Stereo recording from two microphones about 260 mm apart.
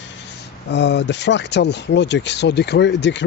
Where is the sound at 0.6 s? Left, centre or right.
Left.